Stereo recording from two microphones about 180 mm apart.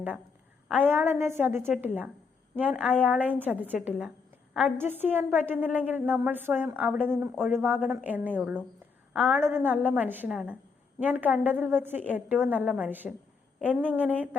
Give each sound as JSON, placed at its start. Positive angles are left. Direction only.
{"t": 0.7, "sound": "a woman's voice", "side_deg": -10}